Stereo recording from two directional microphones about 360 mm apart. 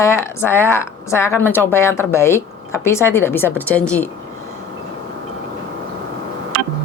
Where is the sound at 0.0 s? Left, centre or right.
Centre.